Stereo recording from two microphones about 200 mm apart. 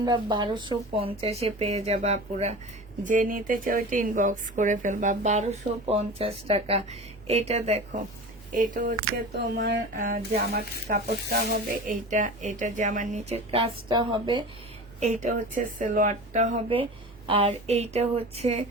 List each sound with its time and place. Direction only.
0.0 s a woman's voice: 20° right (ahead or behind); by 8.9 s 40° right (ahead or behind)
9.3 s speech: 55° right (ahead or behind)
10.0 s speech: 45° right (ahead or behind); by 14.4 s 20° right (ahead or behind)
15.0 s speech: 40° right (ahead or behind)
17.2 s speech: 30° right (ahead or behind)